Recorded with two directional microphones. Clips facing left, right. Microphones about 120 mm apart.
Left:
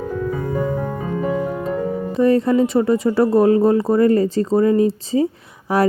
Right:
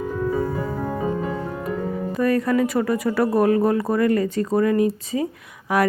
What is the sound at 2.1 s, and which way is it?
Speech, 25° left (ahead or behind).